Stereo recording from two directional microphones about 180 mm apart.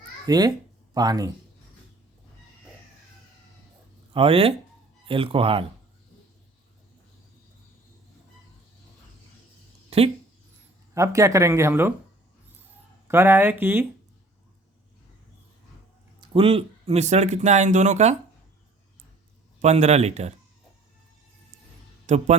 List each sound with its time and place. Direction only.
0.3 s speech: 20° right (ahead or behind)
4.1 s speech: 30° right (ahead or behind)
9.9 s speech: 35° right (ahead or behind)
10.9 s speech: 15° right (ahead or behind)
13.1 s speech: 10° right (ahead or behind)
16.2 s speech: 30° right (ahead or behind)
19.6 s speech: 35° right (ahead or behind)
22.0 s speech: 40° right (ahead or behind)